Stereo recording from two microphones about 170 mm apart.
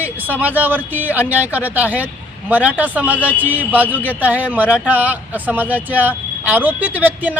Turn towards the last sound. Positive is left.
turn(degrees=-10)  # may be behind; listen again after turning